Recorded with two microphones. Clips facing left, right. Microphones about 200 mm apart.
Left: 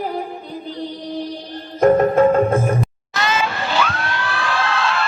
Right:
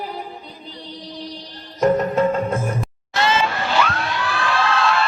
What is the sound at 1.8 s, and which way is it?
Music, 50° left (ahead or behind).